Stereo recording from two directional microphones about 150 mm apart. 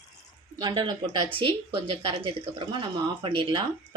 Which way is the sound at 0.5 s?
30° right (ahead or behind).